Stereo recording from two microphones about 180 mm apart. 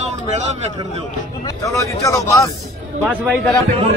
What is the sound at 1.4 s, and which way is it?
Speech, 15° left (ahead or behind).